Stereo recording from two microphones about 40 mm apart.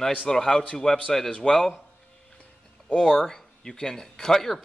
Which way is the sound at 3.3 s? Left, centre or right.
Centre.